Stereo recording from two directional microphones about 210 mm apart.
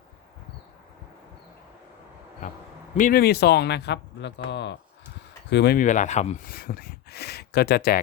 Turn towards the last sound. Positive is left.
turn(degrees=45)  # may be behind; listen again after turning